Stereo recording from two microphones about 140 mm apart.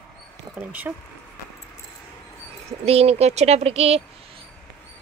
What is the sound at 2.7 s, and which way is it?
Speech, 50° right (ahead or behind).